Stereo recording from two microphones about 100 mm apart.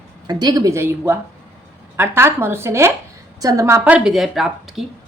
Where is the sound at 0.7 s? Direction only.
25° right (ahead or behind).